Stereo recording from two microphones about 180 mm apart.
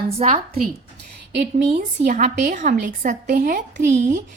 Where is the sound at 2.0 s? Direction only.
45° right (ahead or behind).